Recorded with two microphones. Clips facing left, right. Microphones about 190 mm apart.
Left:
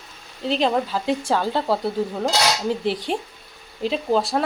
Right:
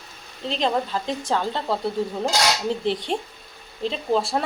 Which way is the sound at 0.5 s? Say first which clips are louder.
Left 3 dB; 5° left (ahead or behind).